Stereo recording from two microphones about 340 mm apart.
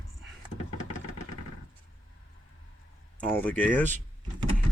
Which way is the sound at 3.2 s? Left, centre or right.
Centre.